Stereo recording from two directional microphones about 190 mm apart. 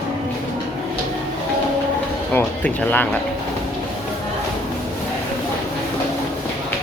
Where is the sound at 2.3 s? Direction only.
10° left (ahead or behind).